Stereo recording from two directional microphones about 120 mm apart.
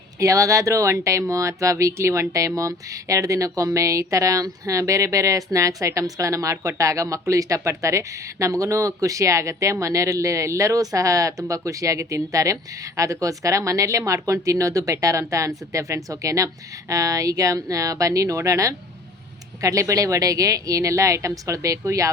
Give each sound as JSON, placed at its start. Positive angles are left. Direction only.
{"t": 0.2, "sound": "speech", "side_deg": -25}